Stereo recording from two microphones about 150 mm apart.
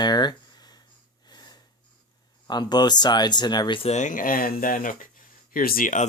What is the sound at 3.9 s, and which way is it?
Speech, 55° left (ahead or behind).